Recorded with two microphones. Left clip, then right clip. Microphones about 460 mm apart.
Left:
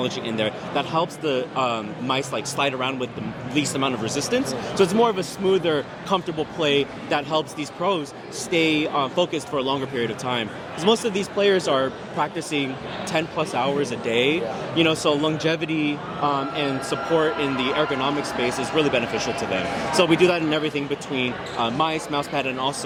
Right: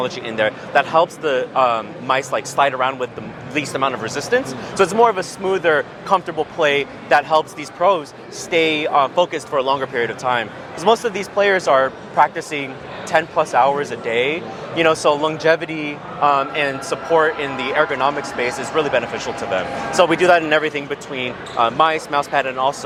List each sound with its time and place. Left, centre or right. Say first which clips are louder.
0.0 s speech: right 5 dB; right